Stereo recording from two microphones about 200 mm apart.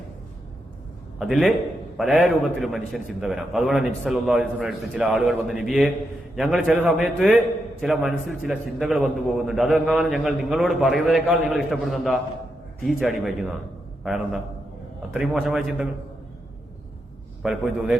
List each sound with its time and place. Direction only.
1.2 s a man's voice: centre (ahead or behind)
17.4 s a man's voice: centre (ahead or behind)